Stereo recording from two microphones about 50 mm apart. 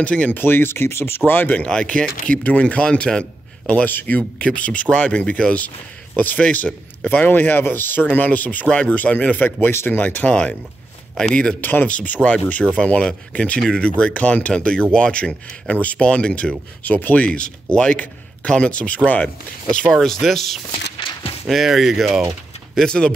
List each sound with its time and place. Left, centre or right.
0.0 s speech: left
0.3 s speech: left
1.7 s speech: left
3.6 s a man's voice: left
4.2 s a man's voice: left
8.6 s a man's voice: left
9.7 s speech: left
9.9 s a man's voice: left
10.2 s speech: left
11.6 s speech: left
16.8 s a man's voice: left
19.9 s speech: centre
22.8 s speech: centre